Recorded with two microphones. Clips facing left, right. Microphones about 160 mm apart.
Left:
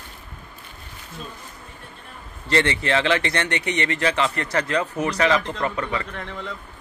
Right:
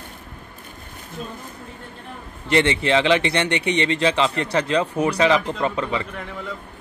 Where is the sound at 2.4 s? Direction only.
20° right (ahead or behind).